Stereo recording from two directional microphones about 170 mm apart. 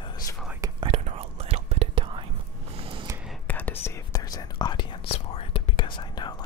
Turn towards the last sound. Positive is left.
turn(degrees=25)  # may be behind; listen again after turning